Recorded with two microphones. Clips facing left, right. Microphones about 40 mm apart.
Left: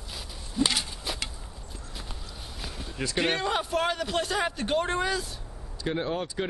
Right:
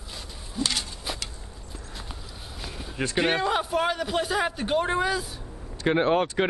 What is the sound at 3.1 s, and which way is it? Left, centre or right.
A man's voice, centre.